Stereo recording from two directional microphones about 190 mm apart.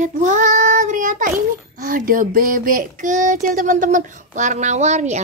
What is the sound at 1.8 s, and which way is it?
A child's voice, 45° right (ahead or behind).